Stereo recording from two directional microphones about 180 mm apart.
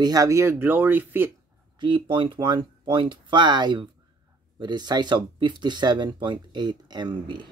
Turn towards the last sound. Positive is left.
turn(degrees=-25)  # may be behind; listen again after turning